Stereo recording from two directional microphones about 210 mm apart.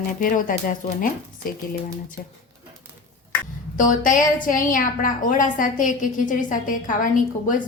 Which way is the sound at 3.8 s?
40° left (ahead or behind).